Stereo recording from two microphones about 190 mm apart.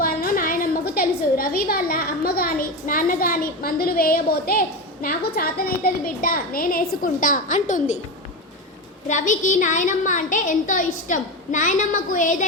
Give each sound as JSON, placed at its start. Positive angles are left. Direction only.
{"t": 0.0, "sound": "a sound", "side_deg": 50}
{"t": 5.0, "sound": "a woman's voice", "side_deg": 55}
{"t": 9.0, "sound": "a woman's voice", "side_deg": 40}